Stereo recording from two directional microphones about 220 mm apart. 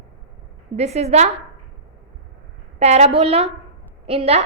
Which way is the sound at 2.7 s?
30° right (ahead or behind).